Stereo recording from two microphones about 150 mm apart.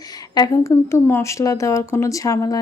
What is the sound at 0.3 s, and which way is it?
Speech, 20° left (ahead or behind).